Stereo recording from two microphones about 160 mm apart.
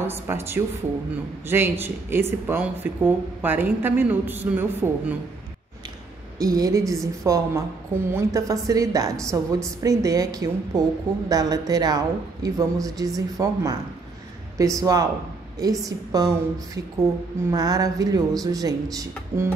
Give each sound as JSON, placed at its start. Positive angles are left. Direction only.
{"t": 0.0, "sound": "speech", "side_deg": -15}
{"t": 6.3, "sound": "a woman's voice", "side_deg": -25}